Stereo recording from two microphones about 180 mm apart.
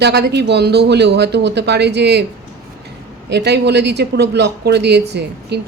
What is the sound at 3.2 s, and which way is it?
A woman's voice, 70° right (ahead or behind).